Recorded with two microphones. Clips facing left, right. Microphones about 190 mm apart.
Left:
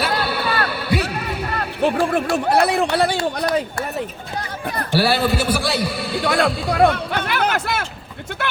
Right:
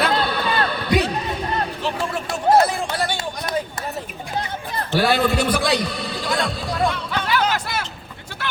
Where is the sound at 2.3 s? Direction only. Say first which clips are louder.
Right 3 dB; 65° left (ahead or behind).